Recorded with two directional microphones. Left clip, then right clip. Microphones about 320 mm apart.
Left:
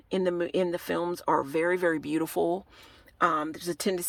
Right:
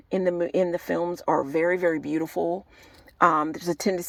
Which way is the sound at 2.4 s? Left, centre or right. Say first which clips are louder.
Even; left.